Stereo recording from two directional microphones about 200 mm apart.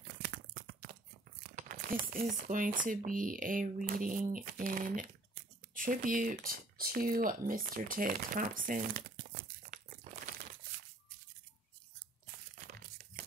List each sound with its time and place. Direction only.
1.5 s speech: 40° right (ahead or behind)